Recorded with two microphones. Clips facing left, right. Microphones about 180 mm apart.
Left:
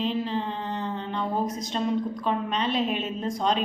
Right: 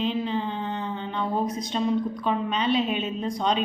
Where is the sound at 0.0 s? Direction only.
Centre (ahead or behind).